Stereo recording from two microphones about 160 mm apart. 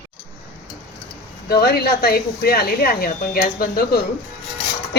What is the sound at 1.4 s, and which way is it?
Speech, 75° left (ahead or behind).